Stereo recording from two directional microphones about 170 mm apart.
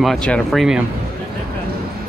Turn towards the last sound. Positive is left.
turn(degrees=0)  # may be behind; listen again after turning